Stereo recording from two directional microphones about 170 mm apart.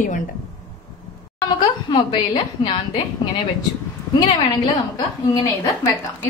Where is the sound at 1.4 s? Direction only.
30° left (ahead or behind).